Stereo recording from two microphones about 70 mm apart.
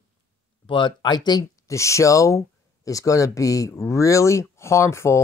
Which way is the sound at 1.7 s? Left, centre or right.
Left.